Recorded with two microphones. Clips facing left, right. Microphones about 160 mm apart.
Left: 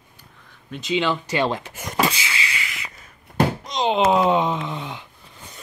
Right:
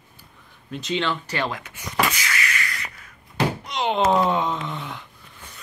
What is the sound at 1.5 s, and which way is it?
Speech, 30° left (ahead or behind).